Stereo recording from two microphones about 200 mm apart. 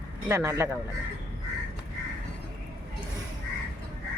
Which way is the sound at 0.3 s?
15° right (ahead or behind).